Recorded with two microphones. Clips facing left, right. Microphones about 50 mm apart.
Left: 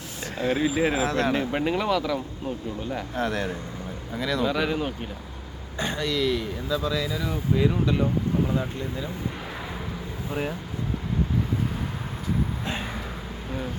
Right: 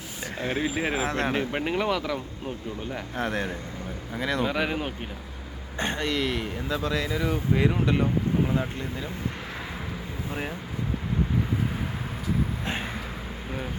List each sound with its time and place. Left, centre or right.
0.3 s speech: right
1.0 s speech: right
1.3 s speech: centre
3.2 s speech: right
4.5 s speech: right
5.7 s speech: right
8.4 s speech: right